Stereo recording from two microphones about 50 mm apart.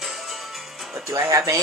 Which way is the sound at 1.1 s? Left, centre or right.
Right.